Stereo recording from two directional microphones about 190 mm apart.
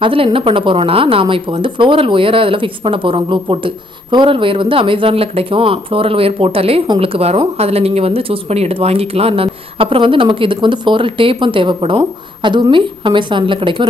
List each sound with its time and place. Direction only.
0.0 s a woman's voice: 30° right (ahead or behind)